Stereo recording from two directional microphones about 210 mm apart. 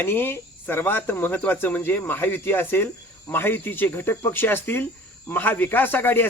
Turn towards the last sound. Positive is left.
turn(degrees=10)  # may be behind; listen again after turning